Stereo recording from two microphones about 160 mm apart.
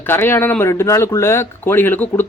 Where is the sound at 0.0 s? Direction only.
15° left (ahead or behind).